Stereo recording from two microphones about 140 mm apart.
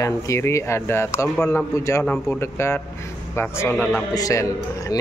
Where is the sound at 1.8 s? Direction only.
20° left (ahead or behind).